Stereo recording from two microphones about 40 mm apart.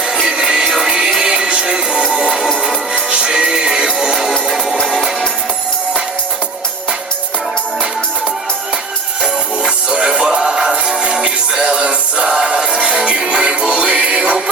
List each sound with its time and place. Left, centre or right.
0.3 s music: centre
3.3 s music: centre
9.2 s music: right
11.8 s music: right
12.2 s music: centre